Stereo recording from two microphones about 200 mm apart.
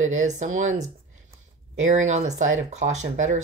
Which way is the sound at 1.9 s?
35° right (ahead or behind).